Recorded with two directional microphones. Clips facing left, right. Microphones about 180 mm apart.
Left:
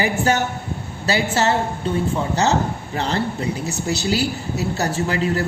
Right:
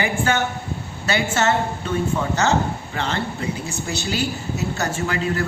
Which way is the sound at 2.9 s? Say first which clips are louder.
Left 4 dB; 35° left (ahead or behind).